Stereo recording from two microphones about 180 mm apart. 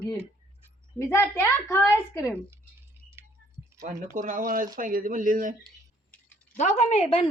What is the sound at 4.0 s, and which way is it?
Speech, 45° right (ahead or behind).